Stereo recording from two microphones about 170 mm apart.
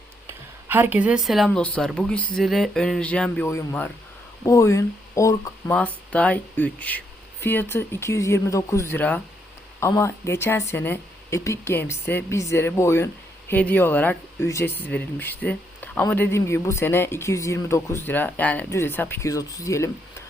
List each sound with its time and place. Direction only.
0.7 s speech: 10° right (ahead or behind); by 5.7 s 20° left (ahead or behind)
5.7 s speech: 10° left (ahead or behind)